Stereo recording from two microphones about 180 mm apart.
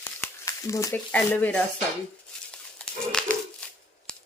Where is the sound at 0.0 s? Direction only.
15° left (ahead or behind).